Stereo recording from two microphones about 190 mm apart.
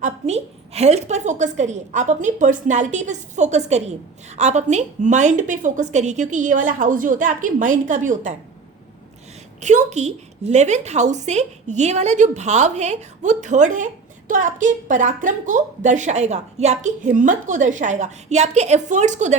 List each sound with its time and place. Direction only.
0.0 s a woman's voice: 35° right (ahead or behind)
9.6 s a woman's voice: 40° right (ahead or behind)